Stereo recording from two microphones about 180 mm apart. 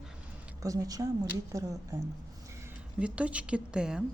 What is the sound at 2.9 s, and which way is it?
A woman's voice, 5° right (ahead or behind).